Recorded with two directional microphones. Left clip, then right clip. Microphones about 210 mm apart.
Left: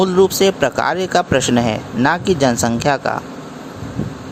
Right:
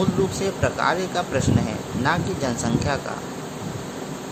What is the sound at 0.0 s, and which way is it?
Speech, 40° left (ahead or behind).